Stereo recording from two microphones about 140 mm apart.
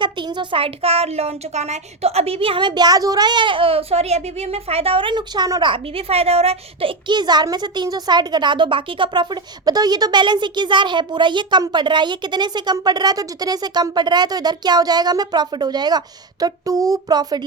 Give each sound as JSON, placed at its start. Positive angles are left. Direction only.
{"t": 0.0, "sound": "a woman's voice", "side_deg": -35}